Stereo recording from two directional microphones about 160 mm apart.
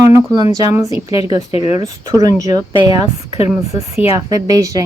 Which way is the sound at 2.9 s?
40° left (ahead or behind).